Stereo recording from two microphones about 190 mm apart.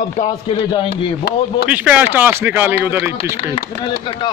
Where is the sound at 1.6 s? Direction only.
5° right (ahead or behind).